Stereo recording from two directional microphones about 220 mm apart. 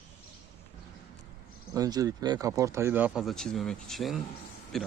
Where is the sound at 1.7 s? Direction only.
15° right (ahead or behind).